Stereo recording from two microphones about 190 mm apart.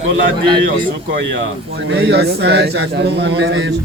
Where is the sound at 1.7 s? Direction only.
65° right (ahead or behind).